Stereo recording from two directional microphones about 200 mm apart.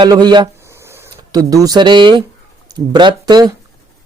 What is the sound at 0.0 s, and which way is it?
Speech, 20° right (ahead or behind).